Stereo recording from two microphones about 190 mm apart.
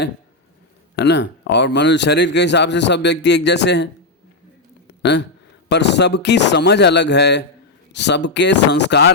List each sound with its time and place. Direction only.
0.9 s speech: 65° left (ahead or behind)
4.9 s a sound: 65° left (ahead or behind)
5.6 s speech: 65° left (ahead or behind)